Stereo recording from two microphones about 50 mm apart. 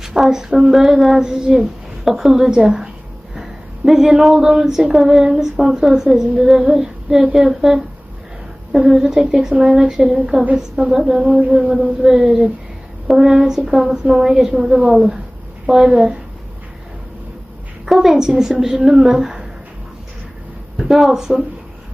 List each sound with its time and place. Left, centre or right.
0.0 s female singing: centre
8.9 s female singing: centre
11.3 s a sound: right
12.0 s female singing: centre
15.6 s a woman's voice: centre
17.8 s female singing: centre
20.7 s female singing: centre